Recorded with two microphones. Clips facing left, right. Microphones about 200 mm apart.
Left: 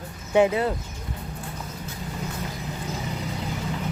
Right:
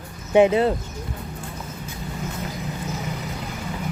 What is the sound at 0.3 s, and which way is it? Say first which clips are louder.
Speech: right 4 dB; 25° right (ahead or behind).